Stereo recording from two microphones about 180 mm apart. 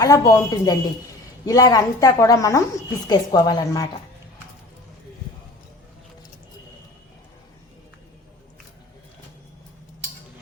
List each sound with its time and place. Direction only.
0.0 s a woman's voice: 15° left (ahead or behind)